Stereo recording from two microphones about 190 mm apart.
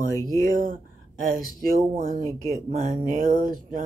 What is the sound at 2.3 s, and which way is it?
Speech, 35° right (ahead or behind).